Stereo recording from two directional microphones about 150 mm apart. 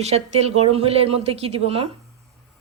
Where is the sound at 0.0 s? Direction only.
45° right (ahead or behind).